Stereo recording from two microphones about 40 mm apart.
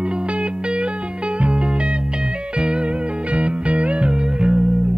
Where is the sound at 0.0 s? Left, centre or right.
Right.